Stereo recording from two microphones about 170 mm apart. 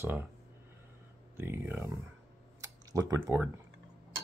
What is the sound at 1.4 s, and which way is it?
Speech, 15° right (ahead or behind).